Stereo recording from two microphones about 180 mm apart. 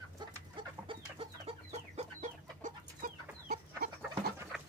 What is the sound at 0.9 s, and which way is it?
Chicken, 30° right (ahead or behind).